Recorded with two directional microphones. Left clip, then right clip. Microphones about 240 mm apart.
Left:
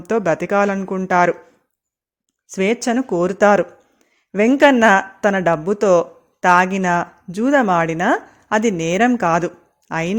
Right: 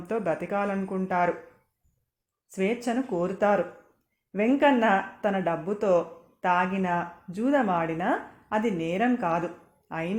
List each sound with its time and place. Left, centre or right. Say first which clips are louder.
0.1 s speech: left 11 dB; left
2.5 s speech: left 9 dB; left